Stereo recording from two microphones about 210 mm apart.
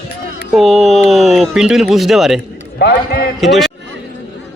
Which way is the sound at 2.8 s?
50° left (ahead or behind).